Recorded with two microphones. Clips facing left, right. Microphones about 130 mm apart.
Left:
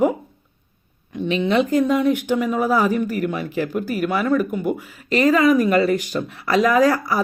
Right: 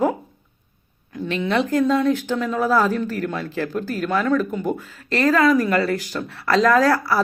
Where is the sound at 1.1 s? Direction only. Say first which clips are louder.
Left 3 dB; 20° left (ahead or behind).